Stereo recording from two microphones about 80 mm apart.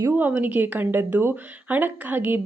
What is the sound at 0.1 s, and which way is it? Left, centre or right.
A woman's voice, right.